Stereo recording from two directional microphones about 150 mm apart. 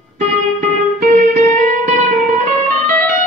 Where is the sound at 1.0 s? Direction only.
60° right (ahead or behind).